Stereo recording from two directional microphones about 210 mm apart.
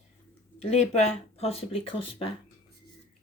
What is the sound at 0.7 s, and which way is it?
A woman's voice, 30° left (ahead or behind).